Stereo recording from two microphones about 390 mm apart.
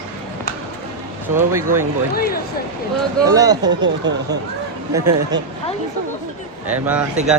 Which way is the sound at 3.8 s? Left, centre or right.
Right.